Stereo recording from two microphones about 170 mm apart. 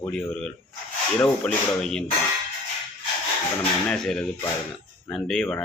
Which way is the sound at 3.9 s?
5° left (ahead or behind).